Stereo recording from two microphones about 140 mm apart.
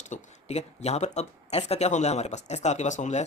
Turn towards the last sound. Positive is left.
turn(degrees=55)  # may be behind; listen again after turning